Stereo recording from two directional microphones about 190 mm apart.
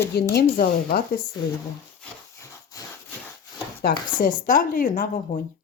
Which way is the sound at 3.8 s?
50° left (ahead or behind).